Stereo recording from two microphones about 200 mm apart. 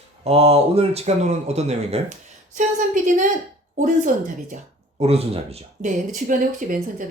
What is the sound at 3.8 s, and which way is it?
Speech, 40° right (ahead or behind).